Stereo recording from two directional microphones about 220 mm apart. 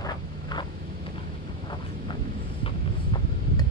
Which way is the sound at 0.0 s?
20° left (ahead or behind).